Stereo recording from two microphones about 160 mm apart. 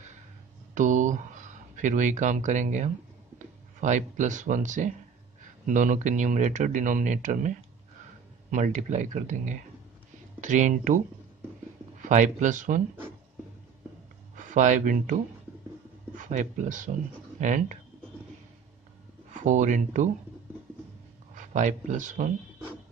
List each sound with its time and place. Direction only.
0.7 s speech: 50° right (ahead or behind)
12.0 s speech: 50° right (ahead or behind)
14.3 s speech: 50° right (ahead or behind)
16.2 s speech: 50° right (ahead or behind)
19.3 s speech: 50° right (ahead or behind)
21.4 s speech: 50° right (ahead or behind)